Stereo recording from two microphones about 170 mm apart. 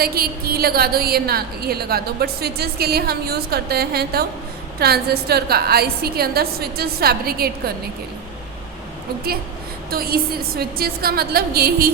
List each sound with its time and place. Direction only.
0.0 s a woman's voice: 65° right (ahead or behind)
9.9 s a woman's voice: 60° right (ahead or behind)